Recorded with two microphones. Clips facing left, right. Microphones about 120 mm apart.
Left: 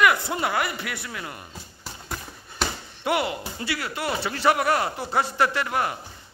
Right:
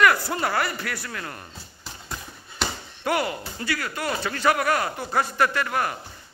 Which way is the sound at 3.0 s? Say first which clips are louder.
Even; 20° left (ahead or behind).